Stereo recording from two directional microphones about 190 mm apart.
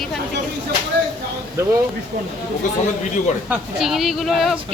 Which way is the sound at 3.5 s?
Centre (ahead or behind).